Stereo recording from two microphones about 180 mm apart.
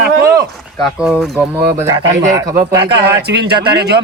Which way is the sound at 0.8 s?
5° right (ahead or behind).